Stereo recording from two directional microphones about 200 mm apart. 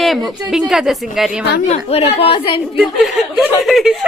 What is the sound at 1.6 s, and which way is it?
Speech, 30° left (ahead or behind).